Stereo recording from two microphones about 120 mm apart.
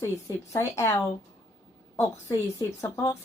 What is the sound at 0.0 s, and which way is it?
Speech, 25° left (ahead or behind).